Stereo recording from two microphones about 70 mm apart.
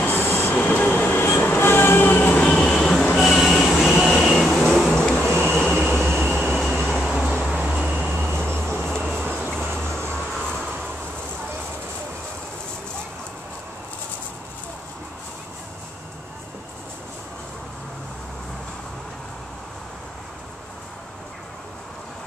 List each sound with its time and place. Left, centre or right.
0.0 s train: left; by 2.7 s centre
2.7 s vehicle: centre
3.2 s train: centre
3.8 s vehicle: centre
7.0 s a sound: centre
7.5 s vehicle: centre
8.2 s vehicle: right
9.2 s music: right
9.6 s vehicle: right
10.1 s train: centre